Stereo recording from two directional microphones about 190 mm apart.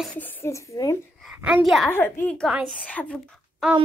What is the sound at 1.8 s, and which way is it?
Speech, 10° left (ahead or behind).